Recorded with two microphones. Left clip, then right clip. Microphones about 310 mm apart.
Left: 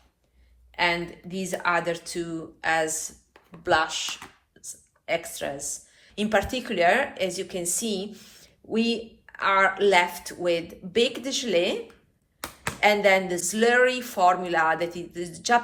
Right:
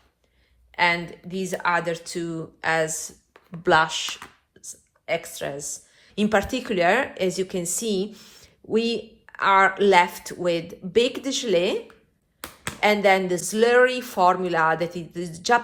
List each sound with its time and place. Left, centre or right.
0.8 s a woman's voice: right
12.8 s a woman's voice: centre